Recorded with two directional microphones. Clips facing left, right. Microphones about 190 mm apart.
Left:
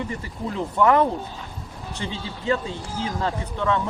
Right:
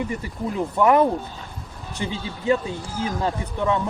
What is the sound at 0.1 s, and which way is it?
Speech, 15° right (ahead or behind).